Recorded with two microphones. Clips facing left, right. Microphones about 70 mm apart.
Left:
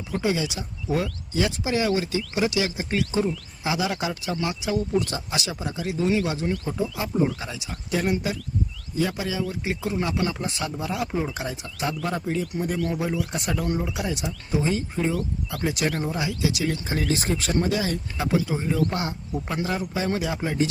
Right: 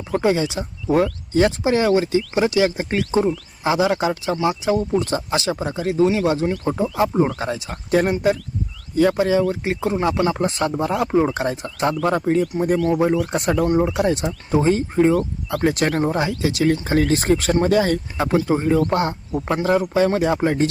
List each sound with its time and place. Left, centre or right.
0.2 s speech: right
4.7 s speech: right
4.9 s speech: right
6.7 s speech: right